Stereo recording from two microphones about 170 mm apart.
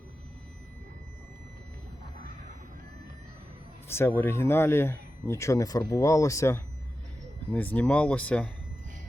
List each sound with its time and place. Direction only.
3.8 s speech: 15° left (ahead or behind)